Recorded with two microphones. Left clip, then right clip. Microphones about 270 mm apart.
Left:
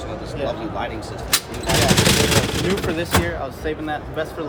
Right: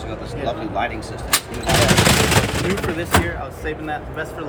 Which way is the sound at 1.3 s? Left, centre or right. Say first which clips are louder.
Right 2 dB; centre.